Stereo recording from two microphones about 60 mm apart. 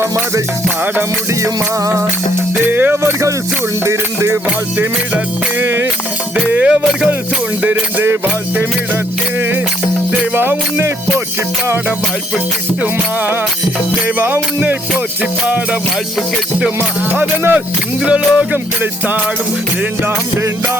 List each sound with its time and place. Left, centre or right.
1.3 s music: right
2.6 s music: right
3.8 s music: right
5.1 s music: right
6.3 s music: centre
7.6 s music: right
10.3 s music: right
12.8 s music: right
15.2 s music: right
17.1 s music: right
18.0 s speech: centre
18.5 s music: right